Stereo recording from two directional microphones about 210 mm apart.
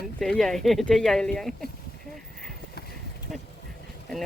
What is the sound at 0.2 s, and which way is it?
Speech, centre (ahead or behind).